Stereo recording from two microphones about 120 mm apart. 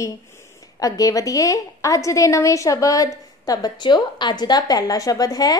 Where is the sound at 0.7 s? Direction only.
30° left (ahead or behind).